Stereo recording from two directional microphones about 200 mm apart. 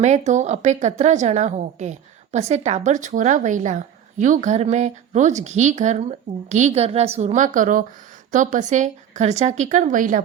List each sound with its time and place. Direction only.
0.0 s a woman's voice: 35° right (ahead or behind)